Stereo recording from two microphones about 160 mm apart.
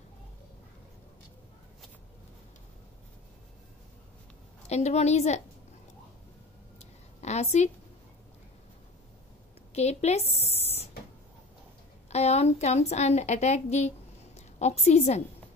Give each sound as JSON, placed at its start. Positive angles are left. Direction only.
{"t": 4.6, "sound": "a woman's voice", "side_deg": 45}
{"t": 6.8, "sound": "a sound", "side_deg": 45}
{"t": 9.8, "sound": "speech", "side_deg": 40}
{"t": 12.1, "sound": "a woman's voice", "side_deg": 40}